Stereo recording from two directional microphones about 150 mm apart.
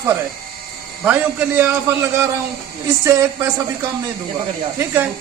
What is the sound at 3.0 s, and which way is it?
Speech, 20° right (ahead or behind).